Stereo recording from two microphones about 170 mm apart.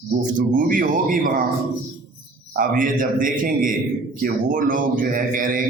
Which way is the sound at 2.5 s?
55° right (ahead or behind).